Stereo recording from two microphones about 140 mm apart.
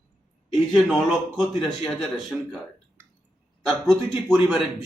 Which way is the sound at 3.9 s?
Centre (ahead or behind).